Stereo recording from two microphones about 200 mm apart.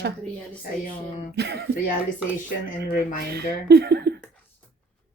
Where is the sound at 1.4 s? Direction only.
55° right (ahead or behind).